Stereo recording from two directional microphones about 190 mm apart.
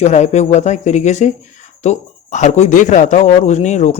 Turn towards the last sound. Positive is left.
turn(degrees=40)  # may be behind; listen again after turning